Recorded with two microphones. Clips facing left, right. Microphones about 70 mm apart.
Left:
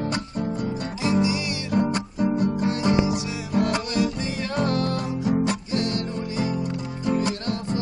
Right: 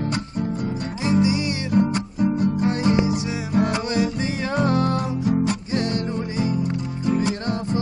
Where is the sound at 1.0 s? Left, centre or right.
Right.